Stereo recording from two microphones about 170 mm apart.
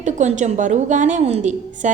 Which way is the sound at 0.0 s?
45° right (ahead or behind).